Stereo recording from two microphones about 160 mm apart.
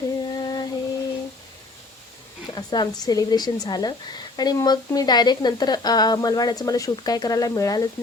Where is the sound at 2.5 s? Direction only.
25° left (ahead or behind).